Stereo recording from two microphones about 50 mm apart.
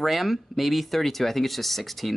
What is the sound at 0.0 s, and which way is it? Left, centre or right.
Speech, centre.